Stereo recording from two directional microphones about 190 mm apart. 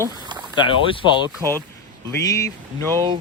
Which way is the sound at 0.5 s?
25° left (ahead or behind).